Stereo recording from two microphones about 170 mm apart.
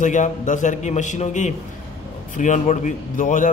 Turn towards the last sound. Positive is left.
turn(degrees=50)  # may be behind; listen again after turning